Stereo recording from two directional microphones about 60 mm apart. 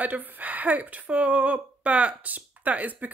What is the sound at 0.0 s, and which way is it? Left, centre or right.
A woman's voice, right.